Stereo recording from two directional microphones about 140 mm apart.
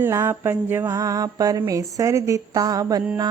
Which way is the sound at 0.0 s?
20° right (ahead or behind).